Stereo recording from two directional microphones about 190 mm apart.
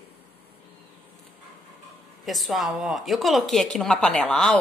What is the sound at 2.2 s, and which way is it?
A woman's voice, centre (ahead or behind).